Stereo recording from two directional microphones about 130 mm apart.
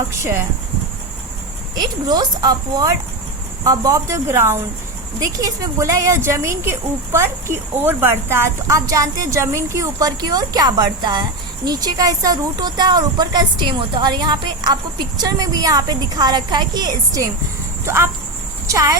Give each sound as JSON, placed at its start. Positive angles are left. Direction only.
{"t": 0.2, "sound": "speech", "side_deg": -20}
{"t": 1.7, "sound": "speech", "side_deg": -30}